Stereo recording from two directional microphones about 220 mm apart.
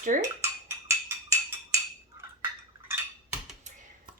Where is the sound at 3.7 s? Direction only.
35° right (ahead or behind).